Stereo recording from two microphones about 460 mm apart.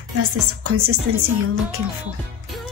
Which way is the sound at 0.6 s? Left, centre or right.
Right.